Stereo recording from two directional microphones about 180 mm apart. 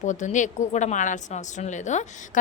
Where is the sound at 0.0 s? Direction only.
45° left (ahead or behind).